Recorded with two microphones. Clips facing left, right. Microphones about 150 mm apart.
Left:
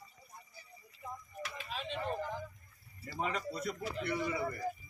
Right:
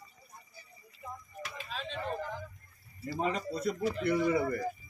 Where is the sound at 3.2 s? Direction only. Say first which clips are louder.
Right 4 dB; 30° right (ahead or behind).